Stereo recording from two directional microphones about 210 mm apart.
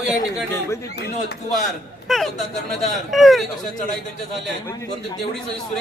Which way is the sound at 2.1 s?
Centre (ahead or behind).